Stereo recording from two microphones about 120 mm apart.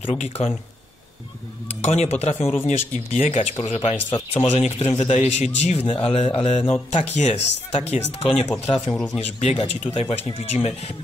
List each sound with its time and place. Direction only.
0.0 s a man's voice: 60° left (ahead or behind)
1.8 s a man's voice: 65° left (ahead or behind)
7.0 s a man's voice: 75° left (ahead or behind); by 8.5 s 60° left (ahead or behind)
8.9 s speech: 5° left (ahead or behind)
9.2 s a man's voice: 65° left (ahead or behind)